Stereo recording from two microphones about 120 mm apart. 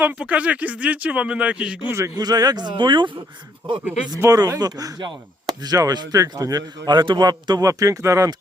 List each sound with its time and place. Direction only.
0.0 s speech: 15° right (ahead or behind)
2.1 s chop: 35° right (ahead or behind)
4.2 s chop: 30° right (ahead or behind)